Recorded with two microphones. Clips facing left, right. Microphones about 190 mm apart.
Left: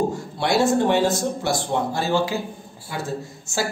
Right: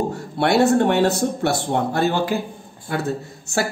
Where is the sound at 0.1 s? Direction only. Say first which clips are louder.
Right 3 dB; 60° right (ahead or behind).